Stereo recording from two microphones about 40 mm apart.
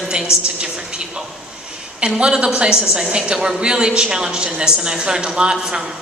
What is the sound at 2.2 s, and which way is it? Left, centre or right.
A woman's voice, right.